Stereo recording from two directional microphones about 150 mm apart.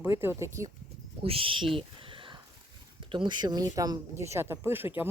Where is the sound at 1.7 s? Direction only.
35° right (ahead or behind).